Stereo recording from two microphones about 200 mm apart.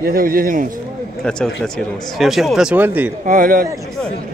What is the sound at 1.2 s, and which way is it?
Speech, 5° left (ahead or behind).